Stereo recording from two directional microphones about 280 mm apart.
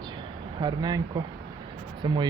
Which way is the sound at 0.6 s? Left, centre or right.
Centre.